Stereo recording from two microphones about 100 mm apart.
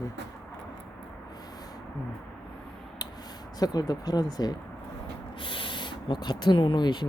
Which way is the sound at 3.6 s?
40° left (ahead or behind).